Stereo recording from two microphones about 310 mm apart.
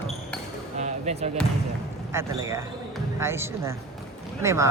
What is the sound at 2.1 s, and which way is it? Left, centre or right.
Speech, centre.